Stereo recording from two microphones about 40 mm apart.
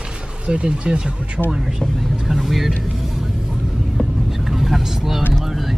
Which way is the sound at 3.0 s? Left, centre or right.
Centre.